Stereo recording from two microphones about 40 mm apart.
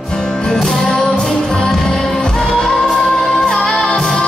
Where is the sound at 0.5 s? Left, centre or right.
Centre.